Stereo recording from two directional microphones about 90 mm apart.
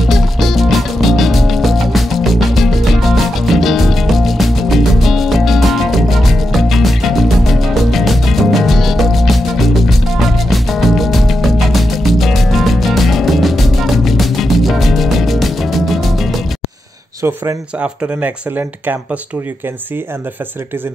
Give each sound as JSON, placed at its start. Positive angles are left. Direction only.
{"t": 0.0, "sound": "music", "side_deg": 0}
{"t": 17.7, "sound": "speech", "side_deg": -15}